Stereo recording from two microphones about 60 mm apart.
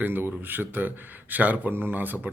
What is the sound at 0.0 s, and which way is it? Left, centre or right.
A man's voice, right.